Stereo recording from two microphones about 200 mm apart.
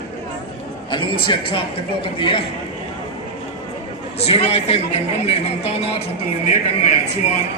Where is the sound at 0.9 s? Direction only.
25° left (ahead or behind).